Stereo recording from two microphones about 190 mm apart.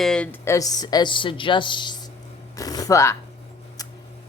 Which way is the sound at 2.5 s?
20° left (ahead or behind).